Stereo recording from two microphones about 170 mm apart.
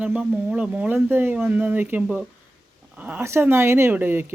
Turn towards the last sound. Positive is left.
turn(degrees=-10)  # may be behind; listen again after turning